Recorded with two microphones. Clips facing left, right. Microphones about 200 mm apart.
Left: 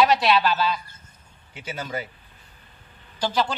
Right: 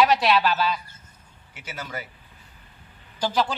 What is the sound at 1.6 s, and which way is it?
Speech, 25° left (ahead or behind).